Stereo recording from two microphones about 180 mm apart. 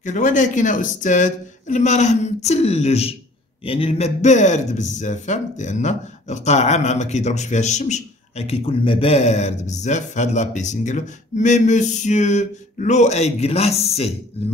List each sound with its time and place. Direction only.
0.0 s speech: 45° left (ahead or behind)